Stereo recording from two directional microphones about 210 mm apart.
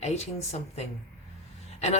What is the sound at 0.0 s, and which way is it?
A woman's voice, 30° left (ahead or behind).